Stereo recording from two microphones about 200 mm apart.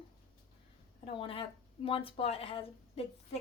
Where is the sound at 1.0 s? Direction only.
30° left (ahead or behind).